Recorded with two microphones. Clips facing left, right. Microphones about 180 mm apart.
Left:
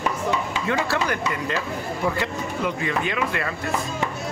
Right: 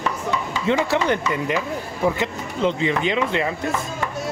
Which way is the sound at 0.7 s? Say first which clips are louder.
Right 5 dB; 20° right (ahead or behind).